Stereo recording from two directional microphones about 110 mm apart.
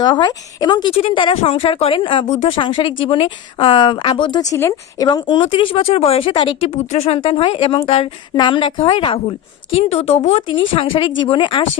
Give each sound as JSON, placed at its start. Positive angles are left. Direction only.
{"t": 0.0, "sound": "speech", "side_deg": 45}
{"t": 0.9, "sound": "speech", "side_deg": 55}
{"t": 4.5, "sound": "speech", "side_deg": 25}
{"t": 5.0, "sound": "speech", "side_deg": 45}
{"t": 5.4, "sound": "speech", "side_deg": 55}
{"t": 6.9, "sound": "speech", "side_deg": 65}
{"t": 9.7, "sound": "speech", "side_deg": 65}
{"t": 10.5, "sound": "speech", "side_deg": 50}